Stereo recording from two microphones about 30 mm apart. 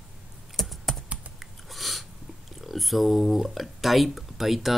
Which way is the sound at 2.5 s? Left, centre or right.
Centre.